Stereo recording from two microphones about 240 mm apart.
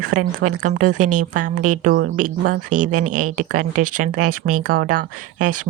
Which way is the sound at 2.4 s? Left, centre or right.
Right.